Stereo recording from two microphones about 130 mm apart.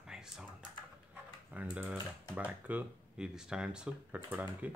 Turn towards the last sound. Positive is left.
turn(degrees=-15)  # may be behind; listen again after turning